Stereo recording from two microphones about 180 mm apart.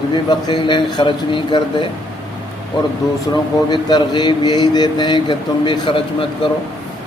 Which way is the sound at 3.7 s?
25° left (ahead or behind).